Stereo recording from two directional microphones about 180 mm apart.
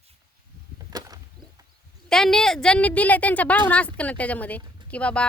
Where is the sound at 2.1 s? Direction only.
5° left (ahead or behind).